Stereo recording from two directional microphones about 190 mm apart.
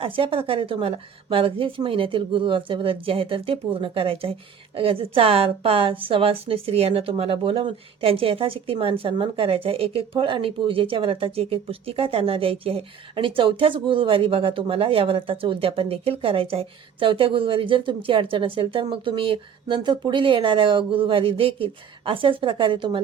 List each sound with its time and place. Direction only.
0.0 s a woman's voice: 30° right (ahead or behind)